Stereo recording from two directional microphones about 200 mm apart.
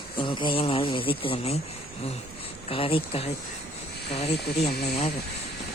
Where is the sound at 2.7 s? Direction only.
25° left (ahead or behind).